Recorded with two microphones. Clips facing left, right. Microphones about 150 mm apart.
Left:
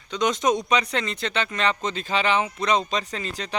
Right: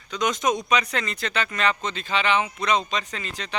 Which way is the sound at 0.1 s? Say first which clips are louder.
Left 2 dB; 30° left (ahead or behind).